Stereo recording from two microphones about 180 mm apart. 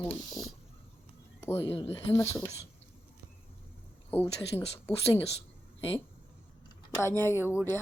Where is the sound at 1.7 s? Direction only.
30° left (ahead or behind).